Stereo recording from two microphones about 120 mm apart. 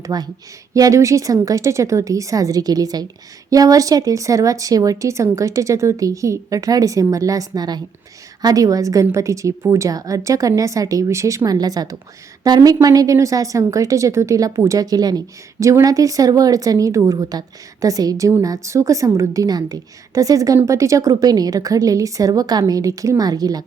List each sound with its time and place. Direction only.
0.0 s speech: 35° right (ahead or behind)